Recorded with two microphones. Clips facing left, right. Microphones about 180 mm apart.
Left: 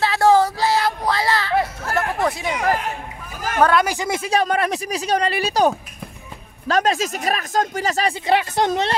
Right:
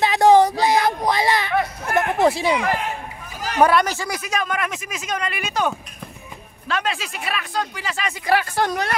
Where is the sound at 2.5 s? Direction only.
45° left (ahead or behind).